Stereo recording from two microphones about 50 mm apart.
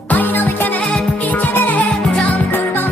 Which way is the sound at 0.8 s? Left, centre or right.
Centre.